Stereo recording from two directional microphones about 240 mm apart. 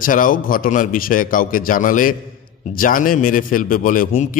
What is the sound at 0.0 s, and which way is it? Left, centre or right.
A man's voice, left.